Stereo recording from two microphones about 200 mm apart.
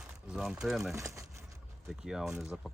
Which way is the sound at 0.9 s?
15° right (ahead or behind).